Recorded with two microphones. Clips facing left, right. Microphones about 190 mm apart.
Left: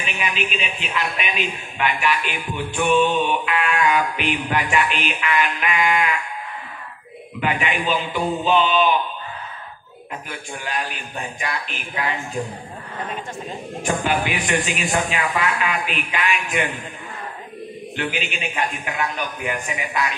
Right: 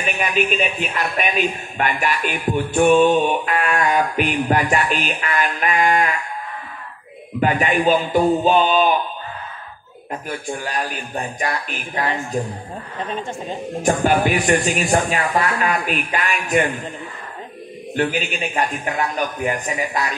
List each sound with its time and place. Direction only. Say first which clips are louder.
0.0 s a man's voice: right 5 dB; 45° right (ahead or behind)
7.3 s a man's voice: right 5 dB; 40° right (ahead or behind)
10.6 s a man's voice: right 3 dB; 40° right (ahead or behind)
13.8 s a man's voice: right 5 dB; 40° right (ahead or behind)
17.9 s a man's voice: right 6 dB; 40° right (ahead or behind)